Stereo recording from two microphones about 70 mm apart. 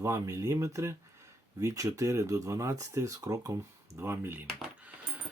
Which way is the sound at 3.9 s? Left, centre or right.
Right.